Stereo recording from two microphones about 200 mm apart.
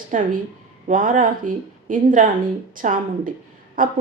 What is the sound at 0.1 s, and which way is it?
Speech, 40° right (ahead or behind).